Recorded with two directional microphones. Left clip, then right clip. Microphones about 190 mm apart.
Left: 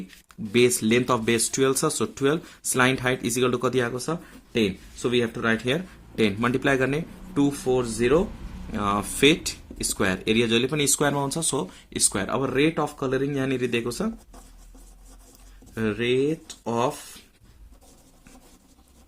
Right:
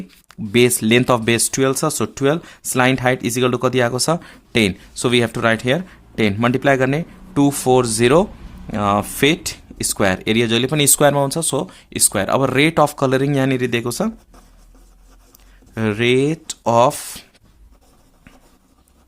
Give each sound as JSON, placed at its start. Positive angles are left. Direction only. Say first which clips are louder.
{"t": 0.3, "sound": "speech", "louder": "right 5 dB", "side_deg": -35}
{"t": 3.9, "sound": "speech", "louder": "right 11 dB", "side_deg": -55}
{"t": 5.6, "sound": "speech", "louder": "right 7 dB", "side_deg": -35}
{"t": 7.6, "sound": "speech", "louder": "right 9 dB", "side_deg": -55}
{"t": 8.7, "sound": "speech", "louder": "right 8 dB", "side_deg": -35}
{"t": 12.4, "sound": "speech", "louder": "right 8 dB", "side_deg": -55}
{"t": 15.7, "sound": "speech", "louder": "right 7 dB", "side_deg": -40}